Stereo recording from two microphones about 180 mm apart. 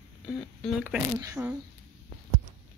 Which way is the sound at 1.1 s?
15° right (ahead or behind).